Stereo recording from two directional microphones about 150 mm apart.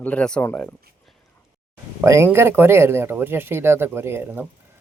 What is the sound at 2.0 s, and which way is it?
Speech, 20° right (ahead or behind).